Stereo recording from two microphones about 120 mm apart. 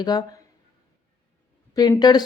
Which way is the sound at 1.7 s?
30° left (ahead or behind).